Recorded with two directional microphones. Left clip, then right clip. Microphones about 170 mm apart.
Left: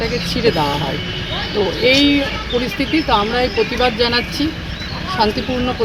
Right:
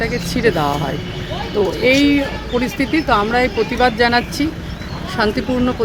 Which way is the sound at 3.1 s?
15° right (ahead or behind).